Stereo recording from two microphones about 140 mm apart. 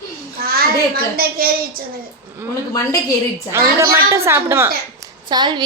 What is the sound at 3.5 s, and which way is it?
A woman's voice, 20° right (ahead or behind).